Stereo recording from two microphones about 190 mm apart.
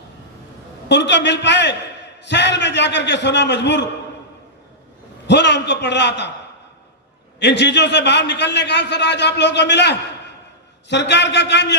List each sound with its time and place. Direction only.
0.9 s a man's voice: 65° left (ahead or behind)
5.3 s a man's voice: 65° left (ahead or behind)
7.3 s a man's voice: 65° left (ahead or behind)